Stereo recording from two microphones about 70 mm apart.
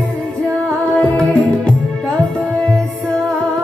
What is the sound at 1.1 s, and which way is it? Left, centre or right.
Music, centre.